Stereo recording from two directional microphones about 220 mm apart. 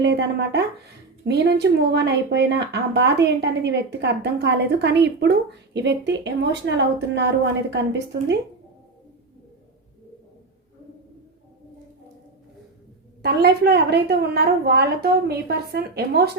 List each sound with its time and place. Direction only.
0.0 s speech: 50° right (ahead or behind)
13.2 s speech: 50° right (ahead or behind)